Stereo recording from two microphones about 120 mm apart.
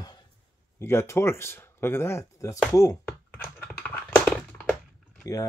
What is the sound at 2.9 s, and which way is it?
Typing, 15° left (ahead or behind).